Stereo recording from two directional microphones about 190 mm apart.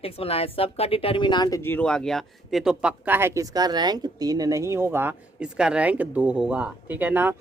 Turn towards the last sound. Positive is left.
turn(degrees=-10)  # may be behind; listen again after turning